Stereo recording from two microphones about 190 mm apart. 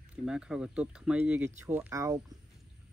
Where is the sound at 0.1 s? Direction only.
5° right (ahead or behind).